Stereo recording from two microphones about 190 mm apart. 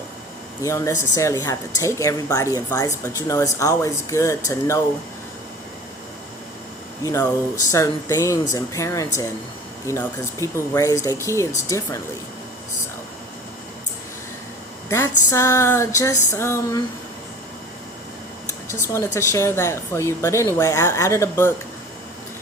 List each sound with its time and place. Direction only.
0.6 s speech: 15° left (ahead or behind)
7.0 s speech: 15° left (ahead or behind)
14.8 s speech: 15° left (ahead or behind)
18.7 s speech: 15° left (ahead or behind)